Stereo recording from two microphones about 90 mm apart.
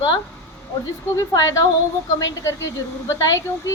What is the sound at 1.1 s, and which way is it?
Speech, 40° left (ahead or behind).